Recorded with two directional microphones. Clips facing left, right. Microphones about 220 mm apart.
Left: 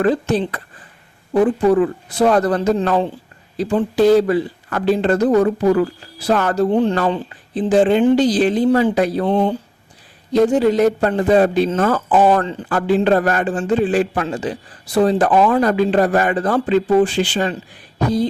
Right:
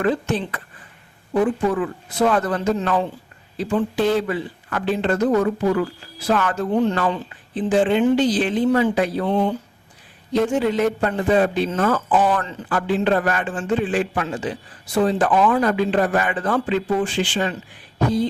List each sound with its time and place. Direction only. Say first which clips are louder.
0.0 s a man's voice: left 4 dB; 35° left (ahead or behind)